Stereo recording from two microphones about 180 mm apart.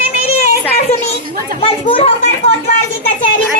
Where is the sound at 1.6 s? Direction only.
30° left (ahead or behind).